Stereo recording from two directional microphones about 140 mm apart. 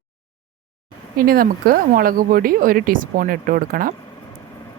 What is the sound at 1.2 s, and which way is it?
A woman's voice, 90° right.